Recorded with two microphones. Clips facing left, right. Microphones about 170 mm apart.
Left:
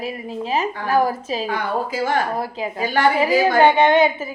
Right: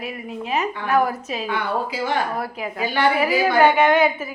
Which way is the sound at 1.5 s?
45° left (ahead or behind).